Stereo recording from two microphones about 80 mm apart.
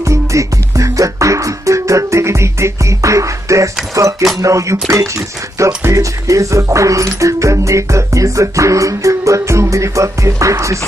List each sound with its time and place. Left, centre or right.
0.0 s music: right
4.4 s speech: right
5.9 s speech: right